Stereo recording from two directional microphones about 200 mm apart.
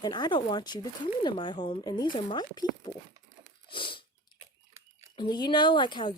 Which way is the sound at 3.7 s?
25° left (ahead or behind).